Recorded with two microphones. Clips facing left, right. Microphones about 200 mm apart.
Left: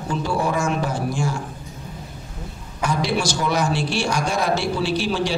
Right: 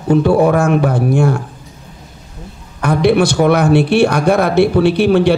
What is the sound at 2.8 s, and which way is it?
A man's voice, 60° right (ahead or behind).